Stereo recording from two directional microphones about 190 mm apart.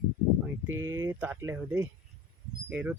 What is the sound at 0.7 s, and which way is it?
Speech, 15° right (ahead or behind).